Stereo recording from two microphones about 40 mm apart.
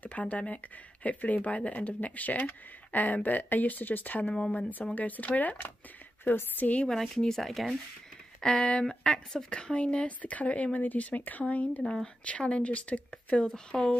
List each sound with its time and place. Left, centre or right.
0.0 s speech: left
4.3 s speech: left
4.9 s speech: left
6.3 s a woman's voice: left
6.6 s speech: left
6.9 s speech: centre
8.4 s speech: centre